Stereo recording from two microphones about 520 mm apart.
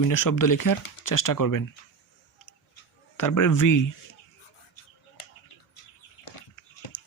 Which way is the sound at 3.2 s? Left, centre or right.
Left.